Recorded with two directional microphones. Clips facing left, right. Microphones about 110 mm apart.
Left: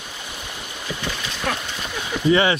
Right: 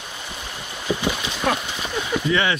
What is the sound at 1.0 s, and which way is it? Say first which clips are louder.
Horse: right 2 dB; 15° right (ahead or behind).